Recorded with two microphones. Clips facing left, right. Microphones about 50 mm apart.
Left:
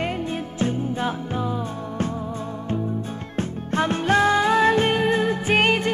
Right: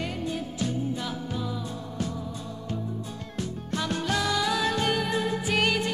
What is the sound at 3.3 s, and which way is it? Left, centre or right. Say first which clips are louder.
Music: left 8 dB; left.